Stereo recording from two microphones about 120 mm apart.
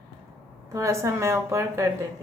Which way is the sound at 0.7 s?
25° right (ahead or behind).